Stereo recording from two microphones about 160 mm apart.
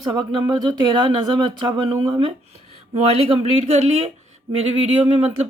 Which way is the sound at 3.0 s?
40° right (ahead or behind).